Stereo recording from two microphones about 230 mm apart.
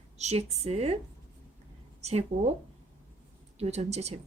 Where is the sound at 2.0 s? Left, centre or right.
Right.